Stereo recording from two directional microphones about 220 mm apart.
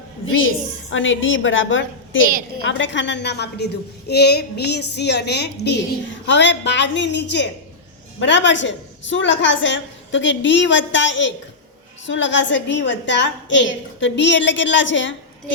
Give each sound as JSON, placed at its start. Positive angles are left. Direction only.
{"t": 0.3, "sound": "a woman's voice", "side_deg": 65}